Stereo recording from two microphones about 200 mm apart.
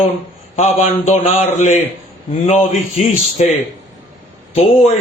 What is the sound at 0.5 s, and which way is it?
A man's voice, 35° left (ahead or behind).